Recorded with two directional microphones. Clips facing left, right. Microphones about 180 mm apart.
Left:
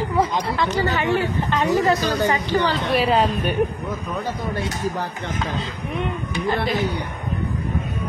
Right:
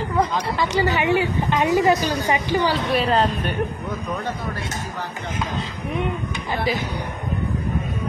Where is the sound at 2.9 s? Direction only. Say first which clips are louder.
Left 1 dB; 5° left (ahead or behind).